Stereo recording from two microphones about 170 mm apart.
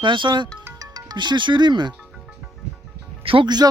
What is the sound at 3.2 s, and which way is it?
Speech, 30° right (ahead or behind).